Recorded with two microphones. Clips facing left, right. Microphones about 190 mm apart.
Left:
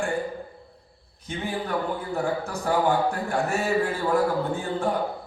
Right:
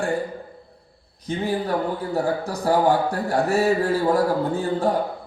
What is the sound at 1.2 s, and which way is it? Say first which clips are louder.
A man's voice: right 6 dB; 35° right (ahead or behind).